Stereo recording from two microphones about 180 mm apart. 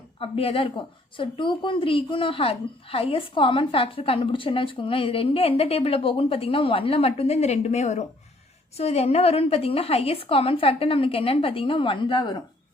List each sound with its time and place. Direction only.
0.2 s speech: 30° left (ahead or behind)